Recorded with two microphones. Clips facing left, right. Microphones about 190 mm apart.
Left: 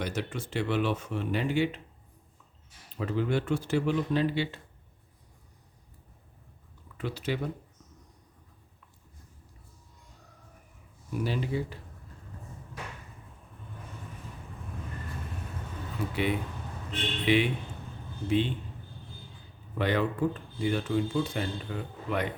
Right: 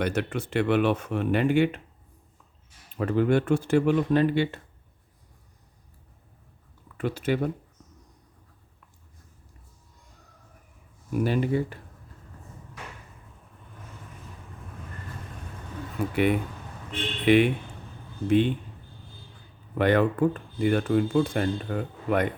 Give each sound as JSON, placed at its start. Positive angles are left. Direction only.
{"t": 0.0, "sound": "speech", "side_deg": -60}
{"t": 3.0, "sound": "speech", "side_deg": -55}
{"t": 6.9, "sound": "speech", "side_deg": -50}
{"t": 11.1, "sound": "speech", "side_deg": -55}
{"t": 16.0, "sound": "speech", "side_deg": -50}
{"t": 17.2, "sound": "speech", "side_deg": -55}
{"t": 19.7, "sound": "speech", "side_deg": -55}